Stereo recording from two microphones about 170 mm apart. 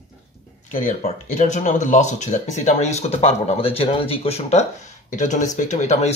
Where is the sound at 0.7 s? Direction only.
45° left (ahead or behind).